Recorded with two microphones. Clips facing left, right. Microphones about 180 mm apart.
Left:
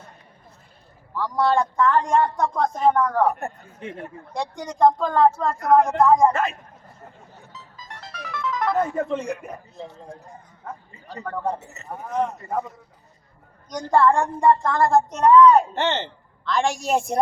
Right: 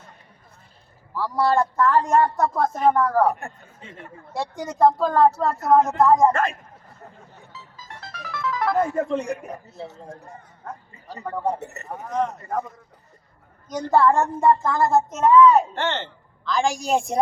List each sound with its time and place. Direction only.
1.1 s speech: 5° right (ahead or behind)
3.4 s speech: 60° left (ahead or behind)
4.4 s speech: 5° right (ahead or behind)
7.5 s music: centre (ahead or behind)
8.0 s speech: centre (ahead or behind)
11.1 s speech: 10° right (ahead or behind)
11.6 s speech: 65° right (ahead or behind)
11.9 s speech: 5° left (ahead or behind)
13.7 s speech: 5° right (ahead or behind)
15.7 s speech: 20° left (ahead or behind)
16.5 s speech: centre (ahead or behind)